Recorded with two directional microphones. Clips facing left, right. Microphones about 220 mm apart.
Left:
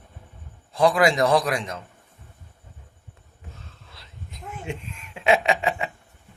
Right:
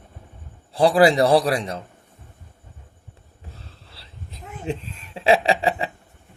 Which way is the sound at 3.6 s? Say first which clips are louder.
Right 1 dB; 30° right (ahead or behind).